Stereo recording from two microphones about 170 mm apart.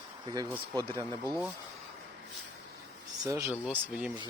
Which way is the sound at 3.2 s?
15° right (ahead or behind).